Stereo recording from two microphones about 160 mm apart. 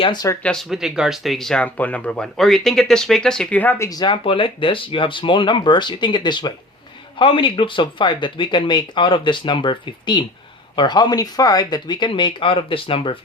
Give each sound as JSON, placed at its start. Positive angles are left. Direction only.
{"t": 0.0, "sound": "speech", "side_deg": 25}
{"t": 0.4, "sound": "speech", "side_deg": 0}
{"t": 3.8, "sound": "speech", "side_deg": 25}